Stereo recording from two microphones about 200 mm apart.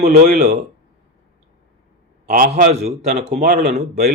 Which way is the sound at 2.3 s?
40° right (ahead or behind).